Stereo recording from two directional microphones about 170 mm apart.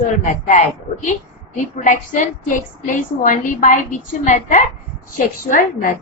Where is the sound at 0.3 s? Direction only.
50° left (ahead or behind).